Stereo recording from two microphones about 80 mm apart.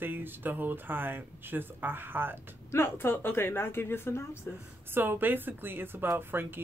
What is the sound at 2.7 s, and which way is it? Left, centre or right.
Speech, left.